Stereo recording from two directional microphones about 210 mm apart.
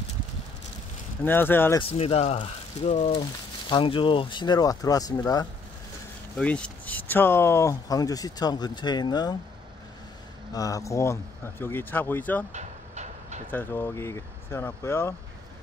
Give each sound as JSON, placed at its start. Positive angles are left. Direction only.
{"t": 1.2, "sound": "speech", "side_deg": 10}
{"t": 1.8, "sound": "speech", "side_deg": 25}
{"t": 6.3, "sound": "speech", "side_deg": 5}
{"t": 10.5, "sound": "speech", "side_deg": 15}
{"t": 12.5, "sound": "train", "side_deg": -35}
{"t": 13.5, "sound": "speech", "side_deg": 10}